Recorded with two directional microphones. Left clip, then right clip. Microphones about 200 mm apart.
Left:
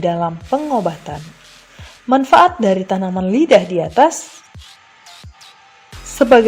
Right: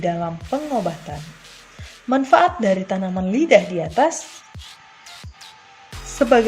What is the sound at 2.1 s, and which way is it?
Speech, 40° left (ahead or behind).